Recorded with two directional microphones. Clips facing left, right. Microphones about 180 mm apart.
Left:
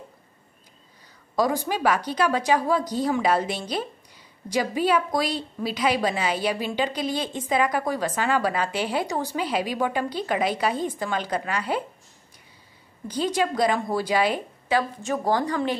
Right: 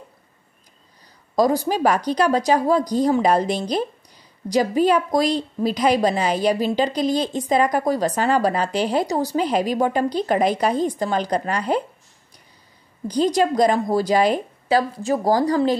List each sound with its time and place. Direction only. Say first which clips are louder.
1.3 s a woman's voice: right 5 dB; 40° right (ahead or behind)
13.1 s a woman's voice: right 6 dB; 40° right (ahead or behind)